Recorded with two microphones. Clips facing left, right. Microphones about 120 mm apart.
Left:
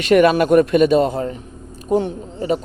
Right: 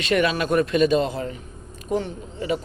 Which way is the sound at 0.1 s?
50° left (ahead or behind).